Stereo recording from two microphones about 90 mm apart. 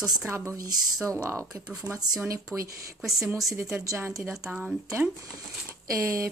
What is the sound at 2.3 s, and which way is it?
Speech, 40° right (ahead or behind).